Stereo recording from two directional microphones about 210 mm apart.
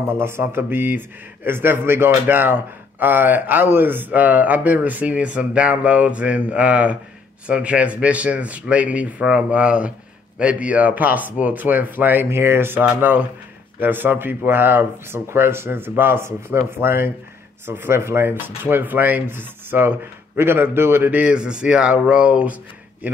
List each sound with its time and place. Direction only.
0.1 s a man's voice: 10° right (ahead or behind)